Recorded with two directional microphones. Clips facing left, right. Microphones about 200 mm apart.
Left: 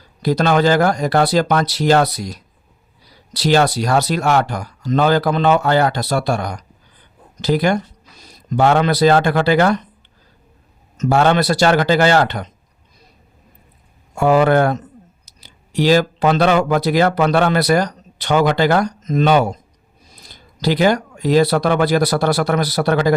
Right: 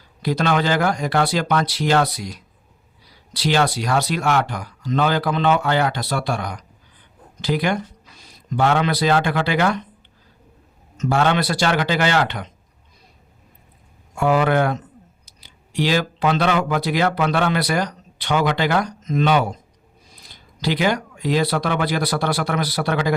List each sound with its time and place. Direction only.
0.2 s speech: 40° left (ahead or behind)
10.9 s speech: 40° left (ahead or behind)
14.2 s speech: 40° left (ahead or behind)